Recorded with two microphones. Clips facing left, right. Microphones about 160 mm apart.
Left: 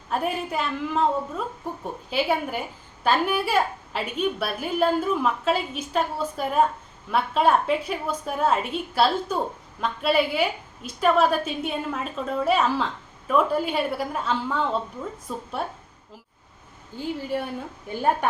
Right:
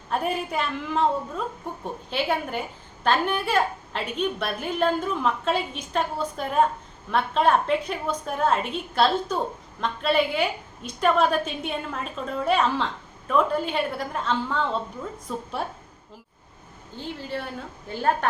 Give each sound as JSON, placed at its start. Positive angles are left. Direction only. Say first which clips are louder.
{"t": 0.1, "sound": "a woman's voice", "louder": "even", "side_deg": 0}
{"t": 17.0, "sound": "a woman's voice", "louder": "left 4 dB", "side_deg": 10}